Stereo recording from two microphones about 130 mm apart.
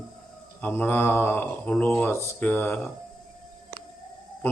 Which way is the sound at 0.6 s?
15° left (ahead or behind).